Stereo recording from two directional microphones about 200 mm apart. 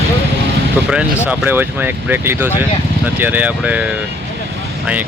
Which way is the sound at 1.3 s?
10° right (ahead or behind).